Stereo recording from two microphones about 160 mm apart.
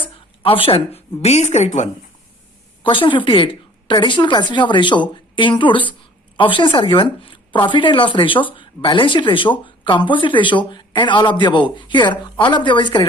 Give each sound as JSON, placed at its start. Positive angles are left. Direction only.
{"t": 0.0, "sound": "speech", "side_deg": 35}
{"t": 2.8, "sound": "a woman's voice", "side_deg": 30}